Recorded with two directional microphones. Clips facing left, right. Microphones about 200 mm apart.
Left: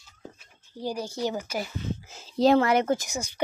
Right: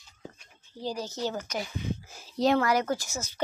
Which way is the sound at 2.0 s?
25° left (ahead or behind).